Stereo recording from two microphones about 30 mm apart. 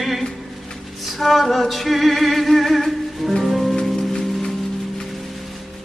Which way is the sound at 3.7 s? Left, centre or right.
Centre.